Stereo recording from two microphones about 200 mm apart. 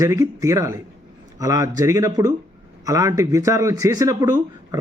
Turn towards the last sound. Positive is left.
turn(degrees=-15)  # may be behind; listen again after turning